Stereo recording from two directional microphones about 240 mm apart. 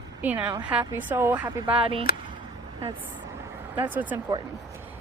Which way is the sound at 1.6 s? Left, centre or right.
Right.